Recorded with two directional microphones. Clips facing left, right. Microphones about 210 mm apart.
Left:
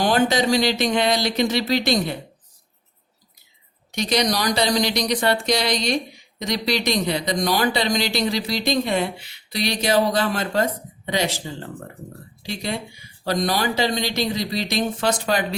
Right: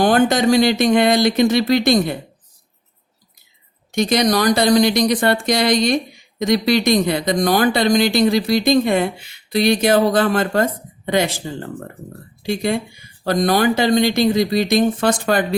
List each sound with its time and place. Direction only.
0.0 s speech: 50° right (ahead or behind)
3.9 s speech: 50° right (ahead or behind)
12.4 s speech: 50° right (ahead or behind)